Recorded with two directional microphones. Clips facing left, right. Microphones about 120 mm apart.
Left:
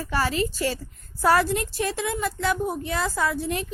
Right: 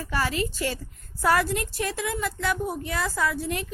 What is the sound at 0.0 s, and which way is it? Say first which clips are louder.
A woman's voice: left 2 dB; 30° left (ahead or behind).